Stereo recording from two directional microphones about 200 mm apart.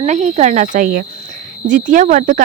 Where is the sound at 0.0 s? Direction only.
35° right (ahead or behind).